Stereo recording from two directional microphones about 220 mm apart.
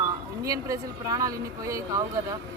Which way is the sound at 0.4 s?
15° right (ahead or behind).